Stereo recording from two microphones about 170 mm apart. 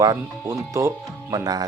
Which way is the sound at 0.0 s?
20° right (ahead or behind).